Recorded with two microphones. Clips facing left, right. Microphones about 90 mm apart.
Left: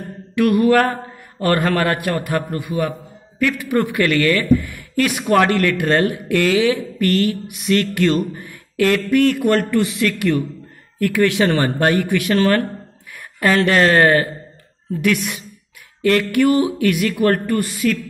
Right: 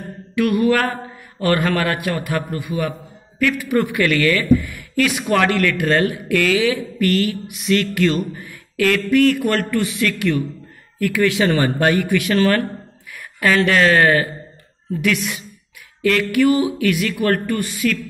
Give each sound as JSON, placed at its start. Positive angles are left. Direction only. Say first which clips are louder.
{"t": 0.4, "sound": "mantra", "louder": "left 2 dB", "side_deg": 45}
{"t": 1.4, "sound": "speech", "louder": "left 1 dB", "side_deg": 35}
{"t": 5.2, "sound": "speech", "louder": "left 3 dB", "side_deg": 25}
{"t": 9.5, "sound": "speech", "louder": "left 3 dB", "side_deg": 15}
{"t": 9.8, "sound": "a man's voice", "louder": "left 2 dB", "side_deg": 25}
{"t": 11.0, "sound": "speech", "louder": "left 1 dB", "side_deg": 40}
{"t": 13.1, "sound": "a sound", "louder": "left 1 dB", "side_deg": 30}
{"t": 13.6, "sound": "speech", "louder": "left 1 dB", "side_deg": 35}
{"t": 16.0, "sound": "speech", "louder": "left 1 dB", "side_deg": 35}